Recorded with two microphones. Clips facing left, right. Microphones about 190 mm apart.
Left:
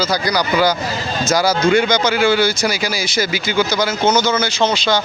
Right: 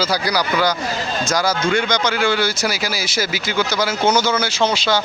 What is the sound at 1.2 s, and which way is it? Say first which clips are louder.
A man's voice: left 5 dB; 5° left (ahead or behind).